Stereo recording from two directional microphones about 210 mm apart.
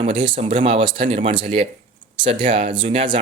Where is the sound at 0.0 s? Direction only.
25° right (ahead or behind).